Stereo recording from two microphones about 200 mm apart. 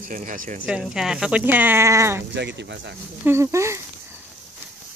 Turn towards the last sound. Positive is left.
turn(degrees=-15)  # may be behind; listen again after turning